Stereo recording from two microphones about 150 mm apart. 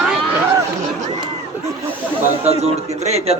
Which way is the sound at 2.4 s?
45° right (ahead or behind).